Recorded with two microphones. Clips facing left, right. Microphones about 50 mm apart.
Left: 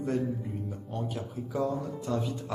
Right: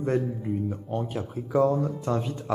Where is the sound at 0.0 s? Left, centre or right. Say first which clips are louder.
Right 4 dB; right.